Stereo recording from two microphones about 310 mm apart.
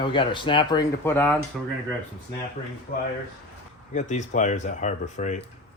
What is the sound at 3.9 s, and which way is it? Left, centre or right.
Speech, left.